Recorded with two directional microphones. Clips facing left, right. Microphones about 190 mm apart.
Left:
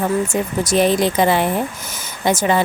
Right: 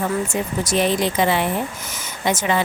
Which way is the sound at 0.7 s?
40° left (ahead or behind).